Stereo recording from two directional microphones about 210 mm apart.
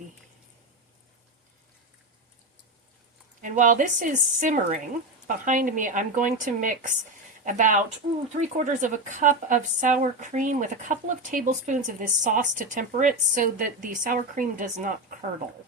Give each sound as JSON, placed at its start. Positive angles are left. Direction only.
{"t": 3.4, "sound": "speech", "side_deg": -35}